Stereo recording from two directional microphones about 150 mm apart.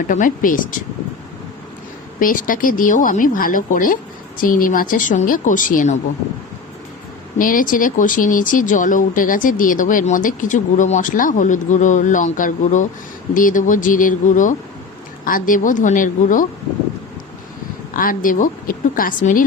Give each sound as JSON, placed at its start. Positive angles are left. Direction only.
{"t": 0.1, "sound": "speech", "side_deg": 60}
{"t": 2.1, "sound": "speech", "side_deg": 65}
{"t": 7.3, "sound": "speech", "side_deg": 65}
{"t": 17.9, "sound": "a woman's voice", "side_deg": 70}